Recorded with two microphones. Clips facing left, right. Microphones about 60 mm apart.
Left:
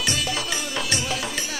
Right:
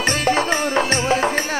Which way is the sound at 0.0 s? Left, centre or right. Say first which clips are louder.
Right 8 dB; right.